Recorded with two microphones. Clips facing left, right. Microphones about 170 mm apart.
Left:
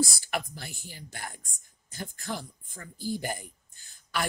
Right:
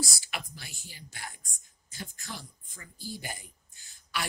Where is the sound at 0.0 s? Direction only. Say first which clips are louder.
Left 7 dB; 50° left (ahead or behind).